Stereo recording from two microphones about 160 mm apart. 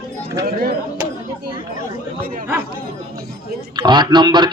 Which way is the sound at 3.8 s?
25° right (ahead or behind).